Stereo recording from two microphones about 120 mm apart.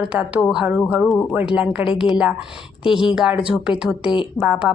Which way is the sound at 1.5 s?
10° right (ahead or behind).